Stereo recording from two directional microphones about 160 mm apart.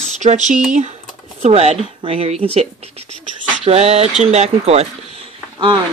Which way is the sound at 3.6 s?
40° right (ahead or behind).